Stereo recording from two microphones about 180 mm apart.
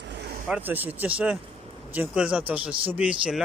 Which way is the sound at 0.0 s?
65° right (ahead or behind).